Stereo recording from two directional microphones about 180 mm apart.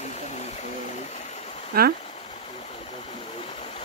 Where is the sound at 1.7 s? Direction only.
60° right (ahead or behind).